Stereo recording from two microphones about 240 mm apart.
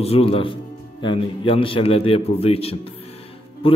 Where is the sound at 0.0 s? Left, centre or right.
Left.